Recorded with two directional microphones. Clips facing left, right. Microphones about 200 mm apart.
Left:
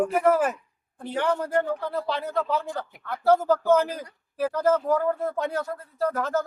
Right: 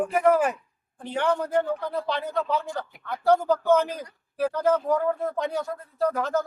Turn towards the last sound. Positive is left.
turn(degrees=5)  # may be behind; listen again after turning